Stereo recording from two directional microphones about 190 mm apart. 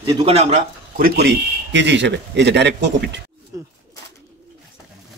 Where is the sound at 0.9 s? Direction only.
55° right (ahead or behind).